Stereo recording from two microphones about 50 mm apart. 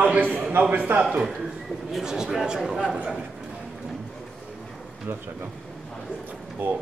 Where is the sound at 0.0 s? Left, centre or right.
Right.